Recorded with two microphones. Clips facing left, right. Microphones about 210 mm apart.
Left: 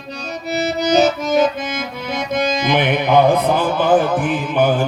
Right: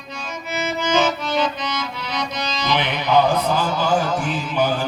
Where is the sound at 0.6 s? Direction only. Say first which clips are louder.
Left 5 dB; 40° left (ahead or behind).